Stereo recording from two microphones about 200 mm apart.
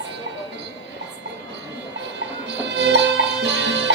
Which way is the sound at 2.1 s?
60° right (ahead or behind).